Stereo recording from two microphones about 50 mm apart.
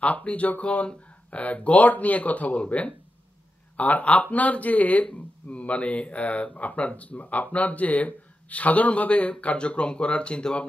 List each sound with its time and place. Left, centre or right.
0.0 s speech: left